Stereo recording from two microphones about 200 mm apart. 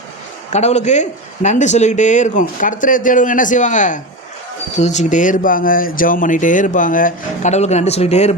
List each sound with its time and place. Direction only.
0.5 s speech: 35° left (ahead or behind)